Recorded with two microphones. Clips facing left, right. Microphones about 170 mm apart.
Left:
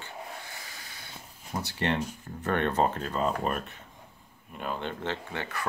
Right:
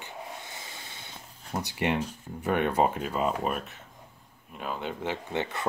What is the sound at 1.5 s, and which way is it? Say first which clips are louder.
Speech: right 1 dB; 10° right (ahead or behind).